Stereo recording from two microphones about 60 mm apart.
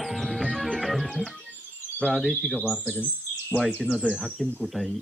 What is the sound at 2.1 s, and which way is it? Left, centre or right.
Speech, centre.